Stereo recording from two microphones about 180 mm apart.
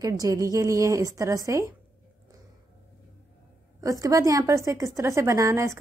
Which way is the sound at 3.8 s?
20° right (ahead or behind).